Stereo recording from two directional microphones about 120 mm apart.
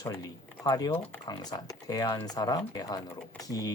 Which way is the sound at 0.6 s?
35° left (ahead or behind).